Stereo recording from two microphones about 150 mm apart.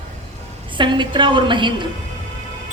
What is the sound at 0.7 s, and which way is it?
A woman's voice, 30° right (ahead or behind).